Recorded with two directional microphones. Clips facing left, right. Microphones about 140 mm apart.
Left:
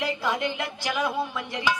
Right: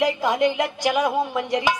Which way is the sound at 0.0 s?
15° right (ahead or behind).